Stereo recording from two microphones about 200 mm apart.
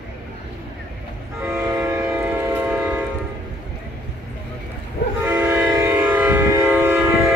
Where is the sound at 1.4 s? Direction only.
10° right (ahead or behind).